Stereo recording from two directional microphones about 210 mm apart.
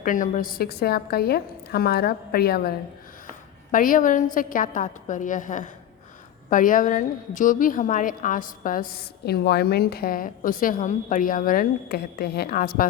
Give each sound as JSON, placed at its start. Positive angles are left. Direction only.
{"t": 0.0, "sound": "a woman's voice", "side_deg": 40}
{"t": 3.2, "sound": "a sound", "side_deg": 40}
{"t": 4.4, "sound": "a woman's voice", "side_deg": 40}